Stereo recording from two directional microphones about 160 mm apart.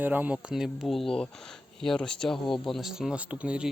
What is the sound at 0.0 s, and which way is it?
Speech, 10° right (ahead or behind).